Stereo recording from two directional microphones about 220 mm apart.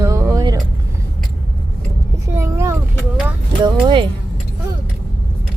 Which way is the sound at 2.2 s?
10° right (ahead or behind).